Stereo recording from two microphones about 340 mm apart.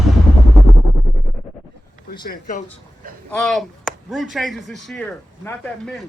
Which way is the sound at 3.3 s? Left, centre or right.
Centre.